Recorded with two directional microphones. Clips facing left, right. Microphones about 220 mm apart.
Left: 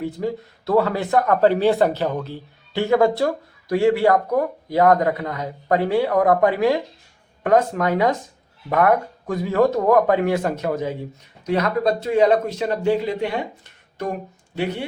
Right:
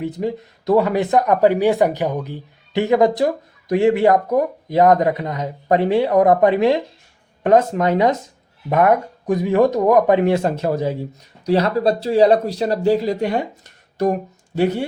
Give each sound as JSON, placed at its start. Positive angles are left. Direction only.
{"t": 0.0, "sound": "speech", "side_deg": -20}